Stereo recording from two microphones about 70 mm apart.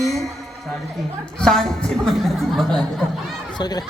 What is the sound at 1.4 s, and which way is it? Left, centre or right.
A woman's voice, centre.